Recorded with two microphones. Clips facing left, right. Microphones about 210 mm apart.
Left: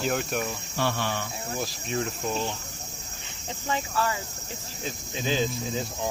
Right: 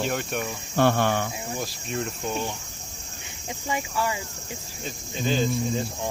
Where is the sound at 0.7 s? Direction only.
55° right (ahead or behind).